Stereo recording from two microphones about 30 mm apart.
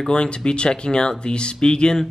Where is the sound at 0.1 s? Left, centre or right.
Left.